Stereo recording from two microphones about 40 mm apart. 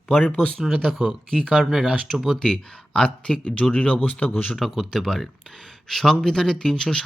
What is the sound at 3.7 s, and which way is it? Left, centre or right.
Speech, left.